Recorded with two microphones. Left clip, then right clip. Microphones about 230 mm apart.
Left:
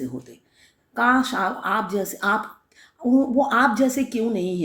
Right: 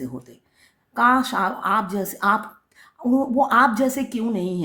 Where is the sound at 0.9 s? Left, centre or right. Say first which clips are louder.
Right 2 dB; right.